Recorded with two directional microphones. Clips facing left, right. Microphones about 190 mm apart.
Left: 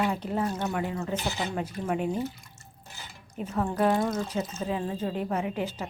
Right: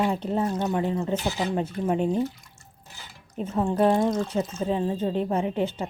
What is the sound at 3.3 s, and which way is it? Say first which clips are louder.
Speech: right 4 dB; 25° right (ahead or behind).